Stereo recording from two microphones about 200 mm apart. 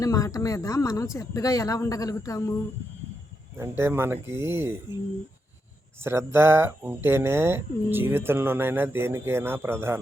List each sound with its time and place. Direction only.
0.0 s speech: 15° left (ahead or behind)
3.6 s speech: 10° right (ahead or behind)
6.0 s speech: 10° right (ahead or behind)